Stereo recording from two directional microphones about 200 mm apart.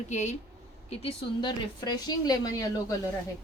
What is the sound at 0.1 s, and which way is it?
A woman's voice, 35° left (ahead or behind).